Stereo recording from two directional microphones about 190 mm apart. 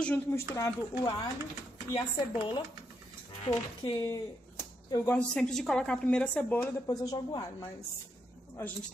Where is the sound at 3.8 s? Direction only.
15° left (ahead or behind).